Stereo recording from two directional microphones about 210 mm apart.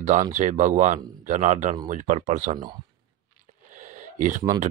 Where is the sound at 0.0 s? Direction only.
35° right (ahead or behind).